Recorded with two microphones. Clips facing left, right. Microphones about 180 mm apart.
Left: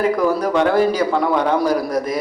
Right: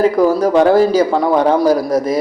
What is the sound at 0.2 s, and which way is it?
Speech, 25° right (ahead or behind).